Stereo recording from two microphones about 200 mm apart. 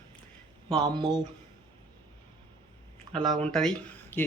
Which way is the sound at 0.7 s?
25° right (ahead or behind).